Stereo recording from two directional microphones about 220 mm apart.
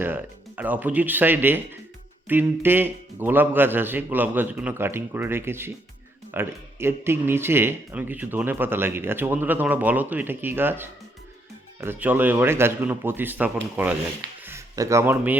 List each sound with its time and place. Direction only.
0.0 s a man's voice: 10° right (ahead or behind)